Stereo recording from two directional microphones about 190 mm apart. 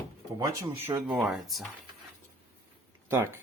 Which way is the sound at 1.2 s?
Centre (ahead or behind).